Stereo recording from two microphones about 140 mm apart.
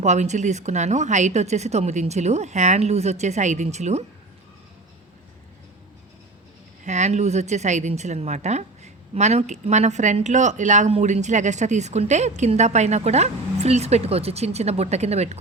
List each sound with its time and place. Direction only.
0.0 s a woman's voice: 55° right (ahead or behind)
6.8 s a woman's voice: 55° right (ahead or behind)